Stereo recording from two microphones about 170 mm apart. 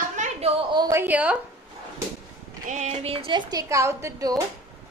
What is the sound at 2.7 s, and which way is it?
A woman's voice, 45° right (ahead or behind).